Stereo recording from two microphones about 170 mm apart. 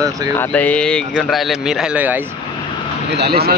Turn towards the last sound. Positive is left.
turn(degrees=-70)  # may be behind; listen again after turning